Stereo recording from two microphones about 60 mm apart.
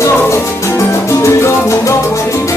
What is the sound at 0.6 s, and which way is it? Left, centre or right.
Music, left.